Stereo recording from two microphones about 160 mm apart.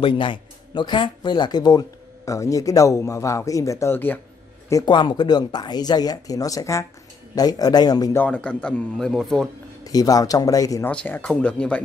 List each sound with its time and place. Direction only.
0.0 s speech: 30° left (ahead or behind); by 4.2 s 15° left (ahead or behind)
4.6 s speech: 25° left (ahead or behind)
8.2 s speech: 5° left (ahead or behind)
9.8 s speech: 20° left (ahead or behind)
10.9 s speech: 10° left (ahead or behind)